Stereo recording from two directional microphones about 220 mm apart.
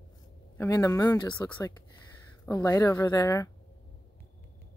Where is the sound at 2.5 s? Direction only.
15° left (ahead or behind).